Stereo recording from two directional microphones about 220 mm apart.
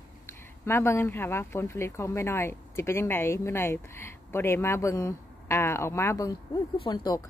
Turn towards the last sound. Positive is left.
turn(degrees=20)  # may be behind; listen again after turning